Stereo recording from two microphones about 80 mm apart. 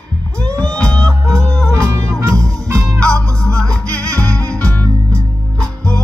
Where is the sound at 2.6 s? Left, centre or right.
Right.